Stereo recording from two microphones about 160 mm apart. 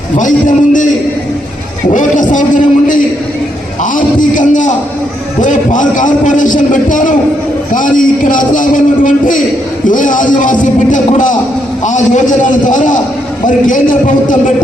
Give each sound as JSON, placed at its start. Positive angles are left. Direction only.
{"t": 0.2, "sound": "a man's voice", "side_deg": 55}